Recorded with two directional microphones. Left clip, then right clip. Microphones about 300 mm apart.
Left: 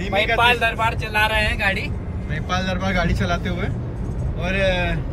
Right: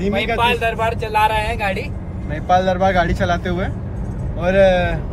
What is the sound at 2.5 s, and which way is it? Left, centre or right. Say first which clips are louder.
Speech: right 9 dB; right.